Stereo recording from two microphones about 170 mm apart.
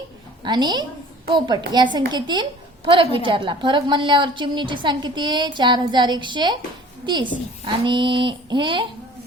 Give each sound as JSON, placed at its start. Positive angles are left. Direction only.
{"t": 0.4, "sound": "a woman's voice", "side_deg": -25}